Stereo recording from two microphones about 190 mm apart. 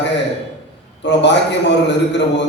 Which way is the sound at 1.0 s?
65° left (ahead or behind).